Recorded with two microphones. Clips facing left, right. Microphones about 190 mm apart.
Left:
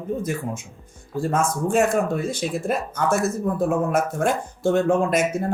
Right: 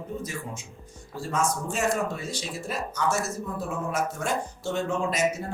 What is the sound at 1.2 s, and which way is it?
A man's voice, 55° left (ahead or behind).